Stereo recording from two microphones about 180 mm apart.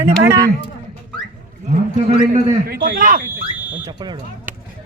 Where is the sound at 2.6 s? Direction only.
55° right (ahead or behind).